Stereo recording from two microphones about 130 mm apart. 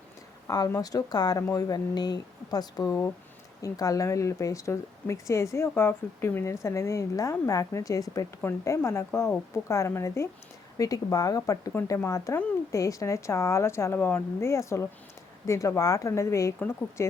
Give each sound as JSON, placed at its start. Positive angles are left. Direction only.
{"t": 0.4, "sound": "speech", "side_deg": 30}
{"t": 11.7, "sound": "speech", "side_deg": 15}